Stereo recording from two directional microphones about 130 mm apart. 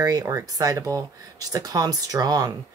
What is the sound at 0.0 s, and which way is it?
Speech, 25° right (ahead or behind).